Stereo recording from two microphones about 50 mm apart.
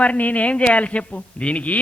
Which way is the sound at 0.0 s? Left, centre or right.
Left.